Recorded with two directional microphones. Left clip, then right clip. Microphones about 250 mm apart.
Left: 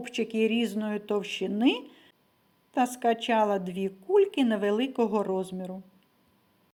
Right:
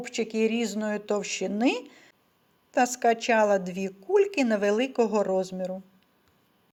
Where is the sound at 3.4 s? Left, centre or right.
Centre.